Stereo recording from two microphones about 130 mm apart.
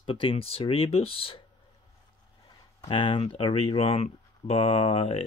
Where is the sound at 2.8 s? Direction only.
40° left (ahead or behind).